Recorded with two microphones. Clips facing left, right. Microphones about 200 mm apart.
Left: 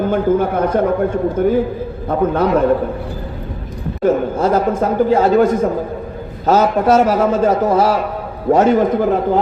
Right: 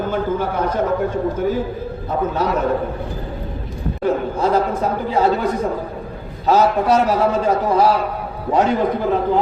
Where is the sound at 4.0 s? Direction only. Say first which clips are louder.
Left 4 dB; 45° left (ahead or behind).